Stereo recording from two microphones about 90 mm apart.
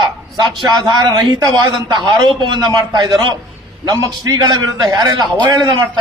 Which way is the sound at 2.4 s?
60° right (ahead or behind).